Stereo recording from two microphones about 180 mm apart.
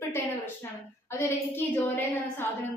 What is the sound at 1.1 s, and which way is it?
A woman's voice, 10° left (ahead or behind).